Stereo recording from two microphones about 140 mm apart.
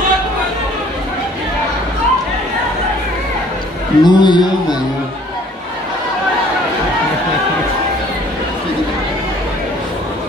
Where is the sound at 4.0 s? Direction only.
30° left (ahead or behind).